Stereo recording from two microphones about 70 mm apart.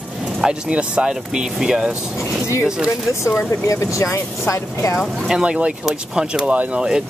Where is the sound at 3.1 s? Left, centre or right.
Left.